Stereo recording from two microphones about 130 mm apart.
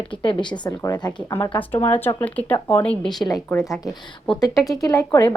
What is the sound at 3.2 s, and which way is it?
A woman's voice, 30° left (ahead or behind).